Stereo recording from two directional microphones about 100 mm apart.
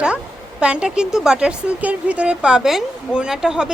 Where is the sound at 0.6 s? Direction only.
10° right (ahead or behind).